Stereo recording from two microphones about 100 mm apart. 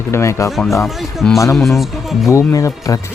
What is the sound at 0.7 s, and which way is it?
Speech, centre (ahead or behind).